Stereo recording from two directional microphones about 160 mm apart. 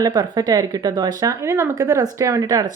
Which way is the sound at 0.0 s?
25° right (ahead or behind).